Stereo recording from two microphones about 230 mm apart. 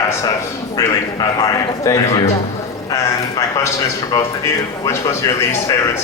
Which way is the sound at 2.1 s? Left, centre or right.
Left.